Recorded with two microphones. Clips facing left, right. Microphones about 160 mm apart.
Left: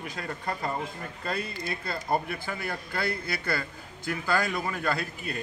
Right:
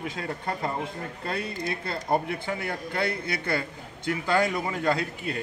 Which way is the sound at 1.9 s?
20° right (ahead or behind).